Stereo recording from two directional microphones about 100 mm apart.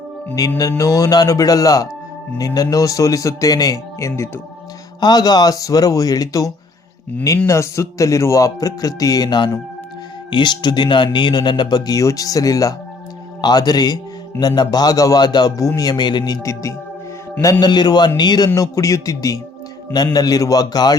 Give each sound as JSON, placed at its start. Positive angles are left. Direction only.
{"t": 0.3, "sound": "a man's voice", "side_deg": 35}
{"t": 17.7, "sound": "a man's voice", "side_deg": 45}